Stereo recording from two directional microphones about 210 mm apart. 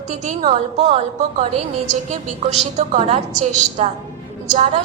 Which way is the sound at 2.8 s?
35° right (ahead or behind).